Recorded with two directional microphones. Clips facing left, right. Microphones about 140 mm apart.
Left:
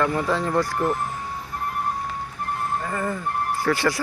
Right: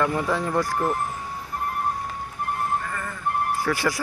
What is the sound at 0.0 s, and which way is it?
Speech, 10° right (ahead or behind).